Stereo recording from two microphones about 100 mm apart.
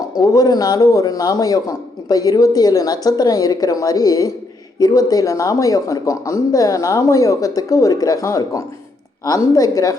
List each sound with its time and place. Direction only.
0.2 s a man's voice: 40° left (ahead or behind)